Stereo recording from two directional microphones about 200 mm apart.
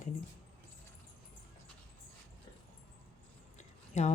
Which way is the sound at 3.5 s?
35° left (ahead or behind).